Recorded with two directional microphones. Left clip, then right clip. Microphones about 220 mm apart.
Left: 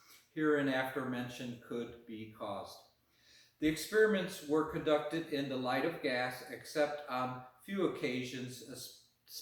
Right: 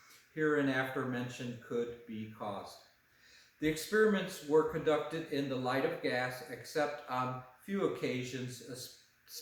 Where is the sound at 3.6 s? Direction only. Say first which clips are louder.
Even; 15° right (ahead or behind).